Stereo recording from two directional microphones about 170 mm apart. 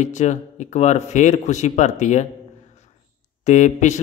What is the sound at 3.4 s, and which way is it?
Speech, 45° left (ahead or behind).